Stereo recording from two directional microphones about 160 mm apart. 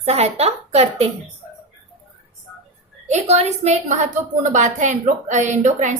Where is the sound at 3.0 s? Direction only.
45° right (ahead or behind).